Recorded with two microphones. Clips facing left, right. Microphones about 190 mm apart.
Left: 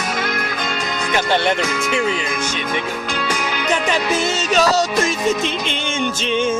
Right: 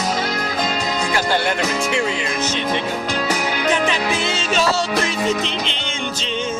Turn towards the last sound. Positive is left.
turn(degrees=45)  # may be behind; listen again after turning